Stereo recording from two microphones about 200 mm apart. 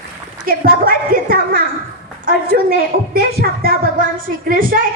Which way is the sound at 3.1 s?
50° right (ahead or behind).